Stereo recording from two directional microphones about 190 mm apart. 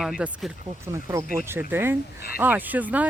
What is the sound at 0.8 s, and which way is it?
Speech, 15° right (ahead or behind).